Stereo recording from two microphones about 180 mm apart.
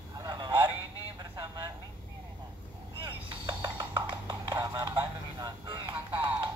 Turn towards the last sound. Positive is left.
turn(degrees=-15)  # may be behind; listen again after turning